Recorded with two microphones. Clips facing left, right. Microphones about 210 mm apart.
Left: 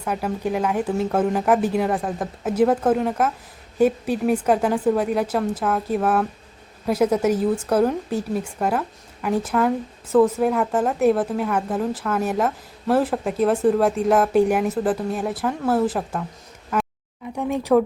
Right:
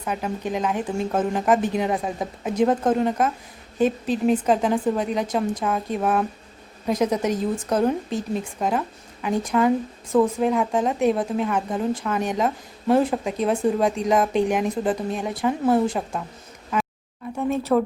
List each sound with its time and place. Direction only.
0.0 s a woman's voice: 5° left (ahead or behind)
1.9 s speech: 5° right (ahead or behind)
2.4 s a woman's voice: 5° left (ahead or behind)
6.8 s a woman's voice: 5° left (ahead or behind)
17.3 s a woman's voice: 15° left (ahead or behind)